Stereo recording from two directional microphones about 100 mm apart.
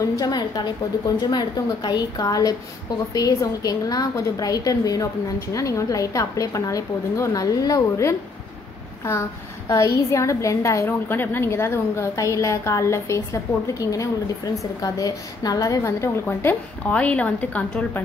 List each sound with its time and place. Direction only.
0.2 s a woman's voice: 45° left (ahead or behind); by 18.0 s 15° left (ahead or behind)